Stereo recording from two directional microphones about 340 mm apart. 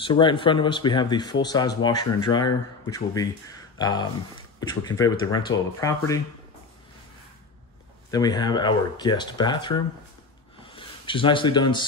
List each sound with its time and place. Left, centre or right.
0.0 s speech: centre
8.1 s speech: centre
10.6 s a sound: centre